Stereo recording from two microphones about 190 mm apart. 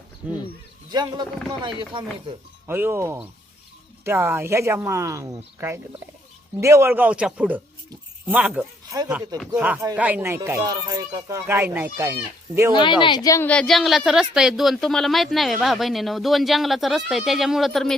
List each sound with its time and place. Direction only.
0.2 s speech: 5° right (ahead or behind)
0.9 s speech: 20° right (ahead or behind)
2.6 s speech: 10° right (ahead or behind)
12.7 s a woman's voice: 25° left (ahead or behind)
13.5 s speech: 5° left (ahead or behind)